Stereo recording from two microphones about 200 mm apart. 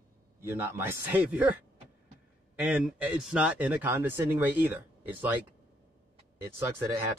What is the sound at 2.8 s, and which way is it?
Speech, 5° right (ahead or behind).